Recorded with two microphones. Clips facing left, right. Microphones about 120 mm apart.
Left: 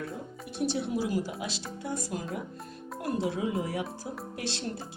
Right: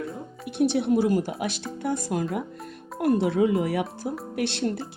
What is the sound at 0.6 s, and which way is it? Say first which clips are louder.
A woman's voice: right 8 dB; 60° right (ahead or behind).